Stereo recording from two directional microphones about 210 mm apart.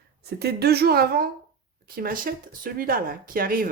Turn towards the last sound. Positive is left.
turn(degrees=-45)  # may be behind; listen again after turning